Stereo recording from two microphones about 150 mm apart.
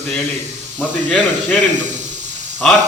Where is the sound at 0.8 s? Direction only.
10° left (ahead or behind).